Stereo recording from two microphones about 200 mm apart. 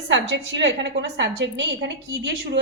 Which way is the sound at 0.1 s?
65° right (ahead or behind).